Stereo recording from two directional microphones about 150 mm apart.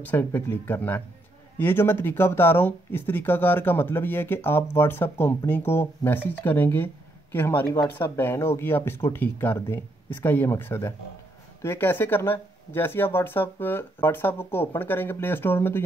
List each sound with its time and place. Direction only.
0.0 s speech: 15° left (ahead or behind)